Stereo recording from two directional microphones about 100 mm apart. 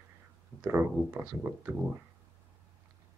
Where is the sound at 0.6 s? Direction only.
25° right (ahead or behind).